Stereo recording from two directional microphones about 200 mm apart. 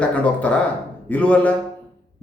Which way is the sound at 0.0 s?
5° left (ahead or behind).